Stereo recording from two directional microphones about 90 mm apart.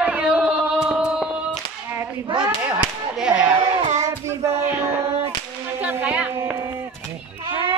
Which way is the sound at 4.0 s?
35° right (ahead or behind).